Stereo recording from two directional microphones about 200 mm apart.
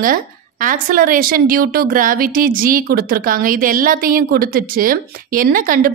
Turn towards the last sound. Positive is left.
turn(degrees=-45)  # may be behind; listen again after turning